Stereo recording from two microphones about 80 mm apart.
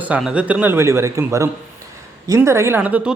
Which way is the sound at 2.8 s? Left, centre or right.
Centre.